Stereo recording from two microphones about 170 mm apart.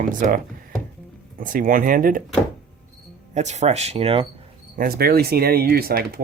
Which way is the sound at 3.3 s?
45° right (ahead or behind).